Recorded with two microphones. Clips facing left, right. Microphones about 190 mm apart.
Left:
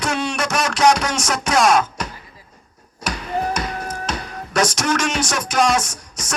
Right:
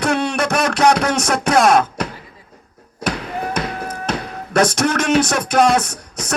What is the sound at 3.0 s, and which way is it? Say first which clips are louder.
Speech: even; 55° right (ahead or behind).